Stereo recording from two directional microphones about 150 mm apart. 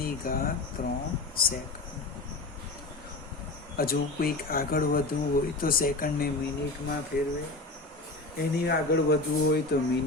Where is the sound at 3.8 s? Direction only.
85° left.